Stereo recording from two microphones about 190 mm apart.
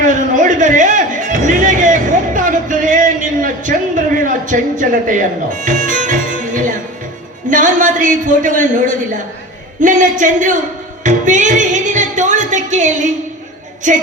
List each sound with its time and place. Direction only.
0.0 s music: 40° right (ahead or behind)
7.5 s a man's voice: 45° right (ahead or behind)
11.0 s music: 40° right (ahead or behind)
13.8 s a sound: 40° right (ahead or behind)